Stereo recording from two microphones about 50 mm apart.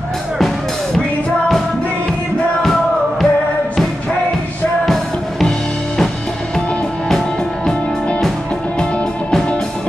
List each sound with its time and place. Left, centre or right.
2.6 s music: centre
4.8 s music: centre
8.7 s music: centre